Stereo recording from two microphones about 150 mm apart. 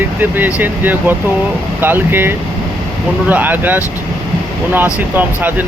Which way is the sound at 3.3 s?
10° right (ahead or behind).